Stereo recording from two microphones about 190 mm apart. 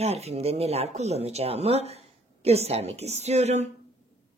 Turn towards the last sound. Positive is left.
turn(degrees=-35)  # may be behind; listen again after turning